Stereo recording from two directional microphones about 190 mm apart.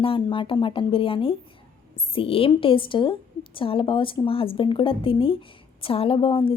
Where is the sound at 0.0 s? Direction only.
30° left (ahead or behind).